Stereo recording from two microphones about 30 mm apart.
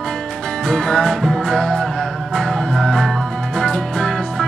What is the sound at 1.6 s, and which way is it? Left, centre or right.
Music, centre.